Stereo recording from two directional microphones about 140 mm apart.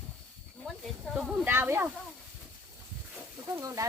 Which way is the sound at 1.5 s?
15° right (ahead or behind).